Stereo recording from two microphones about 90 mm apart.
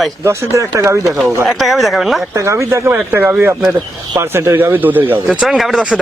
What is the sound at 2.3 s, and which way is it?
Speech, 35° right (ahead or behind).